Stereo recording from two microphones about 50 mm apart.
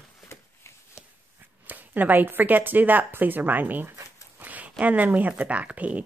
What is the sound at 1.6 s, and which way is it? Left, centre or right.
Speech, right.